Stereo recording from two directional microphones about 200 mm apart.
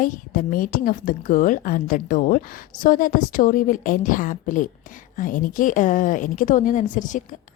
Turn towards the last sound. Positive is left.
turn(degrees=40)  # may be behind; listen again after turning